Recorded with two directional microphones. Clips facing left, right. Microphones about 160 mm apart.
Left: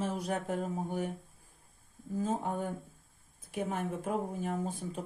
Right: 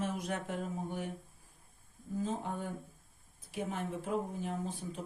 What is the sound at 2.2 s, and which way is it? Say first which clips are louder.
Speech: left 5 dB; 50° left (ahead or behind).